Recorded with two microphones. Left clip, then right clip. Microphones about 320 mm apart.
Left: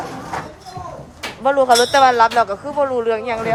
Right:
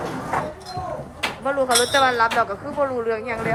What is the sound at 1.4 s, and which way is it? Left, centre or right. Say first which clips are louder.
Speech: left 7 dB; centre.